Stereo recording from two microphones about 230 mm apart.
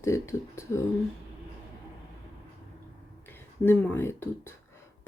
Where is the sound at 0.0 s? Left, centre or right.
Centre.